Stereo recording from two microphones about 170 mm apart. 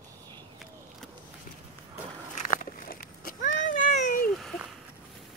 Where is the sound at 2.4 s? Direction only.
45° left (ahead or behind).